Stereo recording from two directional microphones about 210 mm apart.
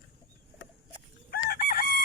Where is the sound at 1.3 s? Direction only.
45° left (ahead or behind).